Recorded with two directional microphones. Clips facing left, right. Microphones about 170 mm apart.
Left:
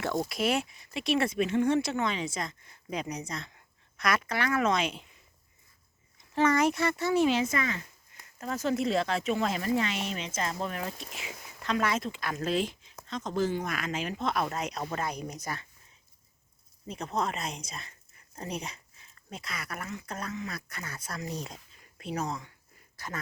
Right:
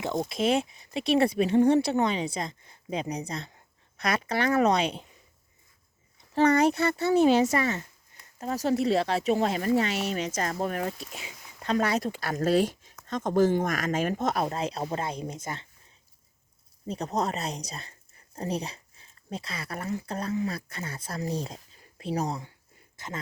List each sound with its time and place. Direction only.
0.3 s speech: 25° right (ahead or behind)
6.3 s speech: 35° right (ahead or behind)
16.8 s speech: 35° right (ahead or behind)
23.0 s speech: 20° right (ahead or behind)